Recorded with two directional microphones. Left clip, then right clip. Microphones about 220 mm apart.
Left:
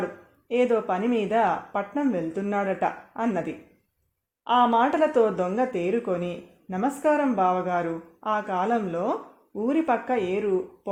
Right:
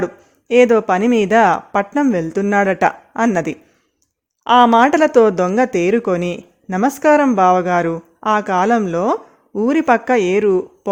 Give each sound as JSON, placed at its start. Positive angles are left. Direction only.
{"t": 0.4, "sound": "speech", "side_deg": -45}